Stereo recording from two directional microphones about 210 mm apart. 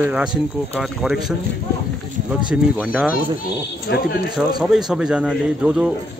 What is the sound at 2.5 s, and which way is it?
Speech, 5° right (ahead or behind).